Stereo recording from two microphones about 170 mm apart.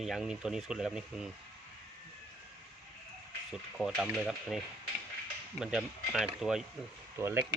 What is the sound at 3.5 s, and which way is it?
Speech, centre (ahead or behind).